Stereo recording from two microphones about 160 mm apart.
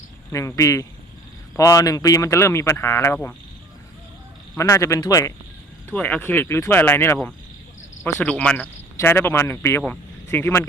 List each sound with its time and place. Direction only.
0.3 s speech: 20° left (ahead or behind)
4.5 s speech: 20° left (ahead or behind)
5.9 s speech: 10° left (ahead or behind)